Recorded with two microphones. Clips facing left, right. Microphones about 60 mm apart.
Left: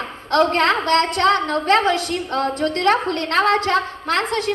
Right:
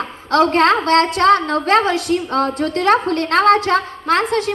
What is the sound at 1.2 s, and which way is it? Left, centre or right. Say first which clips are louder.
Speech: right 4 dB; right.